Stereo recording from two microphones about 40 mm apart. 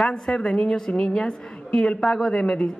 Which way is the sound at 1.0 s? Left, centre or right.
Centre.